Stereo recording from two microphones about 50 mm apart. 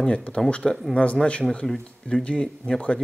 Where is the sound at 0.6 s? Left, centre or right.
Centre.